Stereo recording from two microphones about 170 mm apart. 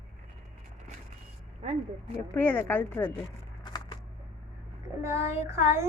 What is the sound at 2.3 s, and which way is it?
Speech, 10° left (ahead or behind).